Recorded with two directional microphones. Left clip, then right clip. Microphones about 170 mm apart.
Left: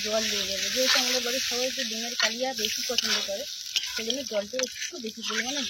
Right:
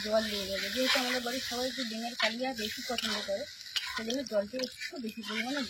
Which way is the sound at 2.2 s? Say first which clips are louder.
Left 4 dB; 15° left (ahead or behind).